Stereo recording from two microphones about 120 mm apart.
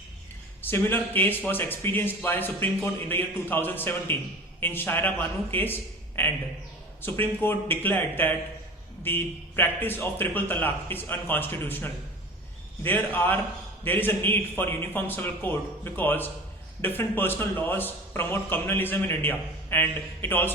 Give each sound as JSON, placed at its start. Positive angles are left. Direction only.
{"t": 0.6, "sound": "a man's voice", "side_deg": 15}